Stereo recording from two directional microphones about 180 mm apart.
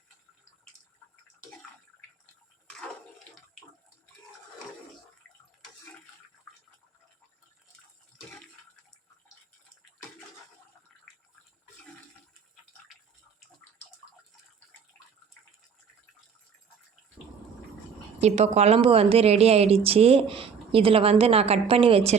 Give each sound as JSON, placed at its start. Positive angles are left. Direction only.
{"t": 18.2, "sound": "speech", "side_deg": -35}